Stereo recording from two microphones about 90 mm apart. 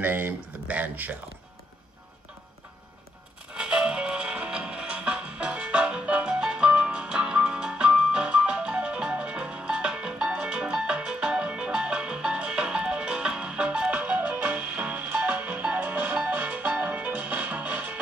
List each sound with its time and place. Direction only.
0.0 s speech: 20° right (ahead or behind)
3.5 s music: 10° right (ahead or behind)